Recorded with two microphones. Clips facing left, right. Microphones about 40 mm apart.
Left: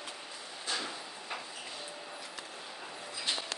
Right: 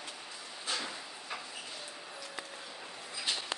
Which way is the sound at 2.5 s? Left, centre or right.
Centre.